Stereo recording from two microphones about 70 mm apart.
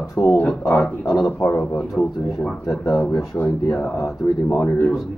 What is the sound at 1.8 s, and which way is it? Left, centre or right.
Speech, centre.